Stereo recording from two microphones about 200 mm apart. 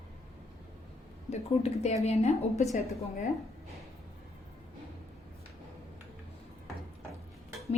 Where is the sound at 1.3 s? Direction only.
35° left (ahead or behind).